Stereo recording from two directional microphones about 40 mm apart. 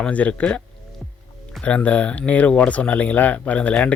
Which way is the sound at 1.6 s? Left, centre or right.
Left.